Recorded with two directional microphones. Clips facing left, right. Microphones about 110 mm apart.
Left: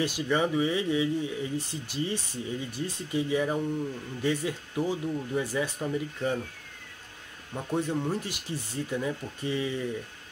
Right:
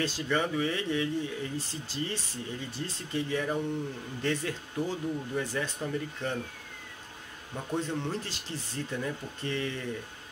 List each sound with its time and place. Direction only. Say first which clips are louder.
0.0 s speech: left 3 dB; 15° left (ahead or behind)
7.5 s speech: left 3 dB; 15° left (ahead or behind)